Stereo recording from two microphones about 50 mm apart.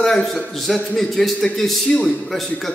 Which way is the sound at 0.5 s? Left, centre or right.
Centre.